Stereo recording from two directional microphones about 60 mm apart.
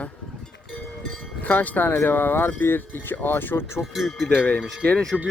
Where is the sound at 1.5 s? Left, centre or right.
Left.